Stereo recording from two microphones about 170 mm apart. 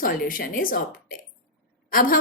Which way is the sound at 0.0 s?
55° left (ahead or behind).